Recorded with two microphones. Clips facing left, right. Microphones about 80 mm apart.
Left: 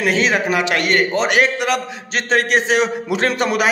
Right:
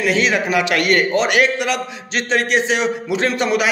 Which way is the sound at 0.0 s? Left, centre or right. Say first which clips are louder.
Even; left.